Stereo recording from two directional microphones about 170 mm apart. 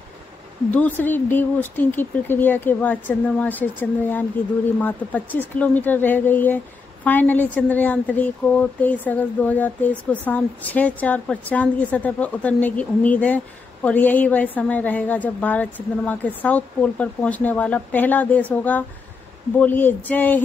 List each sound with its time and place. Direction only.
0.7 s speech: 10° left (ahead or behind)
4.7 s speech: 10° left (ahead or behind)